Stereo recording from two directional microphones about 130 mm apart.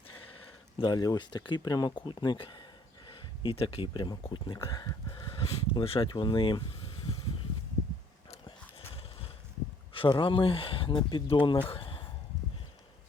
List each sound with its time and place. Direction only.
0.8 s speech: 30° left (ahead or behind)
8.4 s a sound: 45° left (ahead or behind)
9.9 s speech: 40° left (ahead or behind)